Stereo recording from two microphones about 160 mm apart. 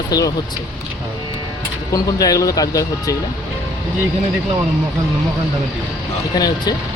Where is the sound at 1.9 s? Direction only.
20° left (ahead or behind).